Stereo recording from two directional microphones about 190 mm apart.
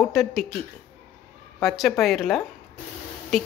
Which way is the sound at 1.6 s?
Centre (ahead or behind).